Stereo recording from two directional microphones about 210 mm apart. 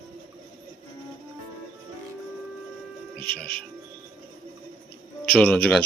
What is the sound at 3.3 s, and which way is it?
Speech, 50° left (ahead or behind).